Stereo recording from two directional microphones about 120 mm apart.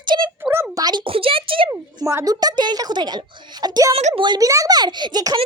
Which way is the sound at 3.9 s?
55° right (ahead or behind).